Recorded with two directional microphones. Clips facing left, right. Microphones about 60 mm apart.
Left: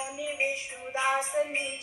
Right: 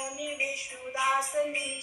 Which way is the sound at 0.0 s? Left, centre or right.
Left.